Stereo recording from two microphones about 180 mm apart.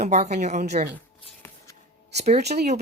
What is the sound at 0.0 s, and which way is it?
Speech, 40° right (ahead or behind).